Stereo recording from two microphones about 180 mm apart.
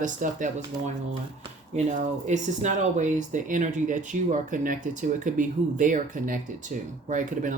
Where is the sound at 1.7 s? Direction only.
40° right (ahead or behind).